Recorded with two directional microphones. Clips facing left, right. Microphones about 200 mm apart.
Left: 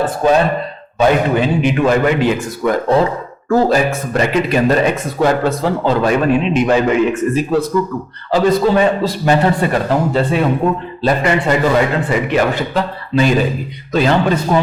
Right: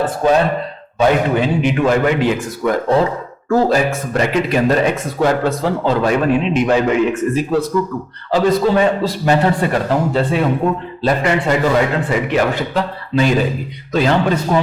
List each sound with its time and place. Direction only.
0.0 s speech: 15° left (ahead or behind)
8.3 s speech: 15° left (ahead or behind)